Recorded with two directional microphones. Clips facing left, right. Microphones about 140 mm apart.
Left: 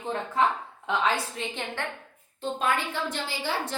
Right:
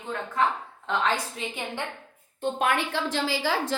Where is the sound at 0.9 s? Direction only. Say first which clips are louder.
Even; 5° left (ahead or behind).